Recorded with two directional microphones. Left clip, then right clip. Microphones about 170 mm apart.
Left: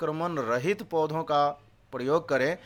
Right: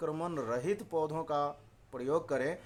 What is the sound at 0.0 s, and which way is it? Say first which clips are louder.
Speech: left 7 dB; 15° left (ahead or behind).